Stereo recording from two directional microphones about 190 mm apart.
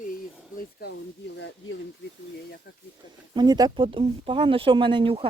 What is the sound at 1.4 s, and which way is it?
Speech, 75° left (ahead or behind).